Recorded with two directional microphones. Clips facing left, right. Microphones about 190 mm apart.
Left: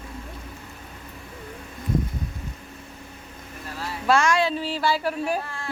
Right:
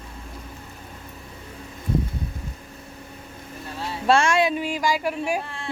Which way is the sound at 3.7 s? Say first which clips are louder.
Right 2 dB; 25° right (ahead or behind).